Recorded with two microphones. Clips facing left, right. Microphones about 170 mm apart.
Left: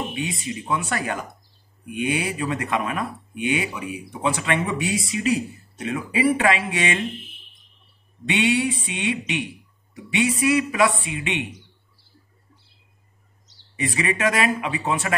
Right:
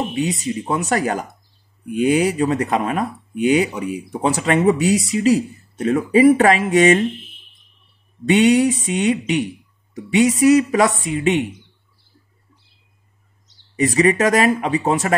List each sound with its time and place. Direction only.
0.1 s speech: 40° right (ahead or behind)
8.3 s speech: 40° right (ahead or behind)
13.7 s speech: 40° right (ahead or behind)